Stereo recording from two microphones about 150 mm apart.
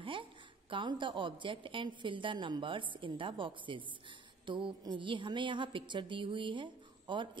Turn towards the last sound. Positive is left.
turn(degrees=-30)  # may be behind; listen again after turning